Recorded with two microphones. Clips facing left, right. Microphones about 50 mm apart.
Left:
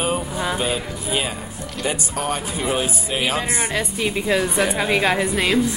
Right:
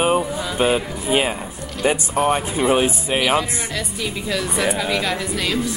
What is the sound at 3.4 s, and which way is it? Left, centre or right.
A woman's voice, left.